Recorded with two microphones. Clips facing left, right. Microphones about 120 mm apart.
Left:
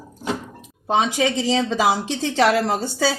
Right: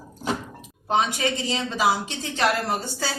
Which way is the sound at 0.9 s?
90° left.